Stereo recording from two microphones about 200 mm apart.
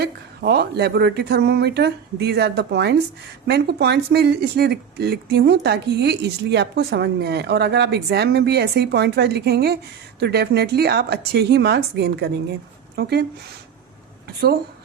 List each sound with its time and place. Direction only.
0.0 s speech: 55° right (ahead or behind)